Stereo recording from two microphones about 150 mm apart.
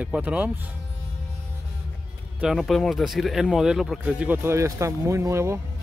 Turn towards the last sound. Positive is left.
turn(degrees=-20)  # may be behind; listen again after turning